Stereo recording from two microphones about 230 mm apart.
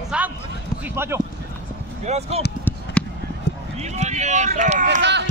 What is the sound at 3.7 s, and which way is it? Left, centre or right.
Speech, right.